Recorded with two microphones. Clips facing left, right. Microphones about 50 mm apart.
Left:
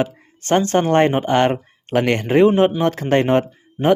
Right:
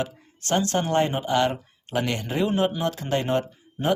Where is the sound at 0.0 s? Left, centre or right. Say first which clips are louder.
Left 8 dB; left.